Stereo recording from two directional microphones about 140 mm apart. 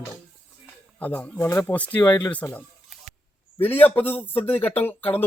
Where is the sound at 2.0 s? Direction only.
25° left (ahead or behind).